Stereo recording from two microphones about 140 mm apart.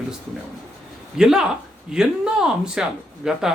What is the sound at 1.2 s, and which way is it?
Speech, 5° right (ahead or behind).